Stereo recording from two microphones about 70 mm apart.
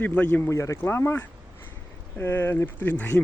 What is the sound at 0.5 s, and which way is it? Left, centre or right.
Speech, left.